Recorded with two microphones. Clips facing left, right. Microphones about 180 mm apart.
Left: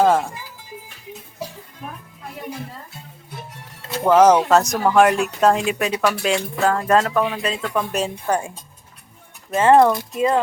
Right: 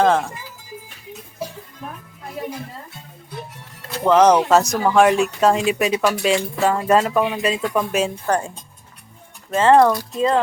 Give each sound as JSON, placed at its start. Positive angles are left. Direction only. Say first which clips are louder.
{"t": 0.0, "sound": "speech", "louder": "even", "side_deg": 5}
{"t": 4.0, "sound": "speech", "louder": "even", "side_deg": 5}
{"t": 8.3, "sound": "speech", "louder": "right 1 dB", "side_deg": 10}